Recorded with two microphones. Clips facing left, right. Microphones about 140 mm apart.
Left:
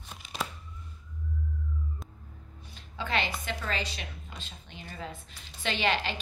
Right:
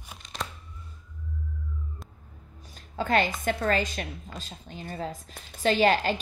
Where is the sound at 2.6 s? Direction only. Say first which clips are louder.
Right 6 dB; 45° right (ahead or behind).